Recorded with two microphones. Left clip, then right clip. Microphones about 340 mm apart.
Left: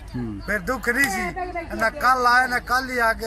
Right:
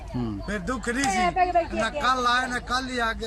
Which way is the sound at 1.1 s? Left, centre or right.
Right.